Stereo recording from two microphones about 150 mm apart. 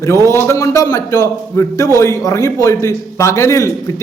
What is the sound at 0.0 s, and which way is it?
A man's voice, 20° left (ahead or behind).